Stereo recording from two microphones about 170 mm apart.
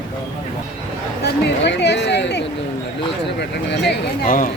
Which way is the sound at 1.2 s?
90° left.